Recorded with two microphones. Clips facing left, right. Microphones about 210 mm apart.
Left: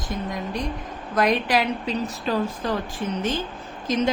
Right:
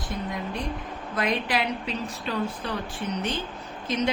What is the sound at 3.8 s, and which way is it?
Speech, 40° left (ahead or behind).